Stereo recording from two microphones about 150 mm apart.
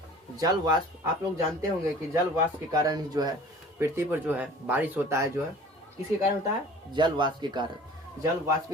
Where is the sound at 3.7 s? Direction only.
15° right (ahead or behind).